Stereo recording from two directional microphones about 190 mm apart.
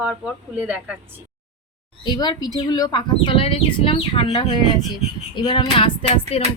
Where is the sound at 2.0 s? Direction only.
25° left (ahead or behind).